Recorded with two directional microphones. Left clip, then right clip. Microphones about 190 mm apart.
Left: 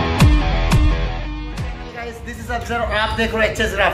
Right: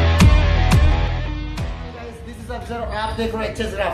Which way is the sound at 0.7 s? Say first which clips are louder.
Even; centre (ahead or behind).